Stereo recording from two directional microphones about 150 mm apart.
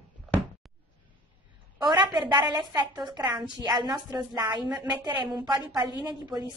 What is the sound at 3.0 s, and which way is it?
A woman's voice, 30° right (ahead or behind).